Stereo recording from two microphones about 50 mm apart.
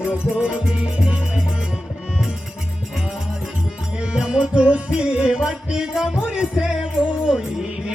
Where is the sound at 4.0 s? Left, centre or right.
Centre.